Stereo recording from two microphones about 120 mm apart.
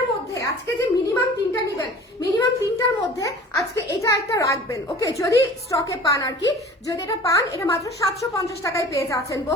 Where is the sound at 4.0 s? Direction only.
25° left (ahead or behind).